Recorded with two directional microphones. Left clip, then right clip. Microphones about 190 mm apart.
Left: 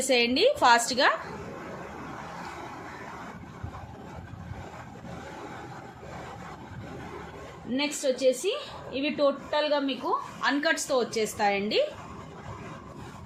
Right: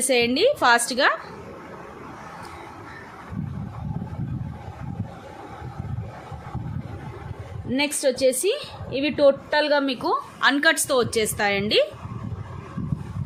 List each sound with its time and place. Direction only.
0.1 s a woman's voice: 30° right (ahead or behind)
7.8 s a woman's voice: 70° right (ahead or behind)
10.4 s a woman's voice: 45° right (ahead or behind)